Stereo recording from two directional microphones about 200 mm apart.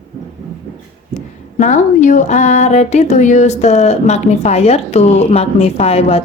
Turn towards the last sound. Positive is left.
turn(degrees=30)  # may be behind; listen again after turning